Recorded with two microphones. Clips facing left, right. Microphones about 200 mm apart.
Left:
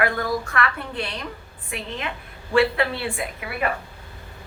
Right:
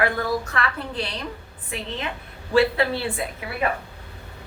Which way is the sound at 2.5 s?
35° right (ahead or behind).